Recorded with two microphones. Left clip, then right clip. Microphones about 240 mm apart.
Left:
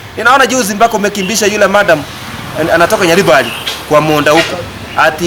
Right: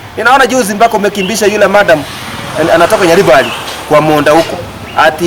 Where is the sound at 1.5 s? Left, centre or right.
Centre.